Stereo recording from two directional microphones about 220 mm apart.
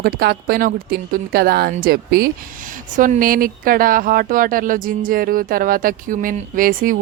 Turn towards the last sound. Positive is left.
turn(degrees=-40)  # may be behind; listen again after turning